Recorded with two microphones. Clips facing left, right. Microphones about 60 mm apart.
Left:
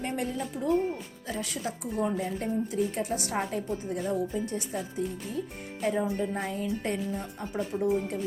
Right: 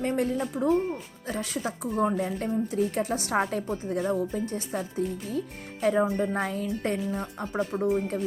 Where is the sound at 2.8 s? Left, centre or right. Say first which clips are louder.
Right 2 dB; right.